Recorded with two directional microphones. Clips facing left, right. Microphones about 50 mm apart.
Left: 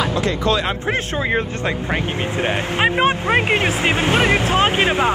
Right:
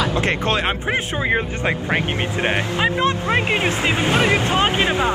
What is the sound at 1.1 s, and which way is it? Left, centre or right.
Speech, centre.